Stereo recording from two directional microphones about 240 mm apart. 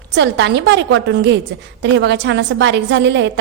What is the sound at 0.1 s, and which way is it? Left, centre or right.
A woman's voice, right.